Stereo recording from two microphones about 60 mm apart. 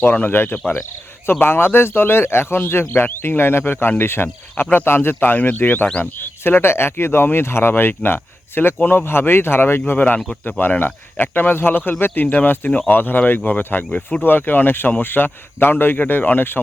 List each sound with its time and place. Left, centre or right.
0.0 s speech: left